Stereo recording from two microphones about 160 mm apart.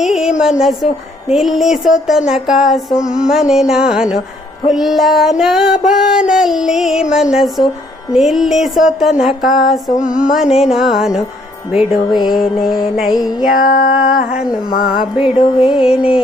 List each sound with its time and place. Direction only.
0.0 s a sound: centre (ahead or behind)
0.6 s female singing: centre (ahead or behind)
13.5 s music: 60° left (ahead or behind)
15.1 s female singing: 5° right (ahead or behind)
15.4 s music: 35° left (ahead or behind)
15.8 s female singing: 5° right (ahead or behind)